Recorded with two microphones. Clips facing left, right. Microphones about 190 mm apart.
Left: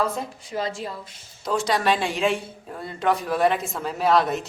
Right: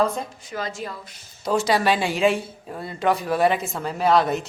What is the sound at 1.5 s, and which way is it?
Speech, centre (ahead or behind).